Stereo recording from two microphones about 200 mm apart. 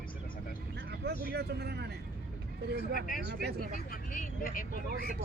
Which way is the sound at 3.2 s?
55° right (ahead or behind).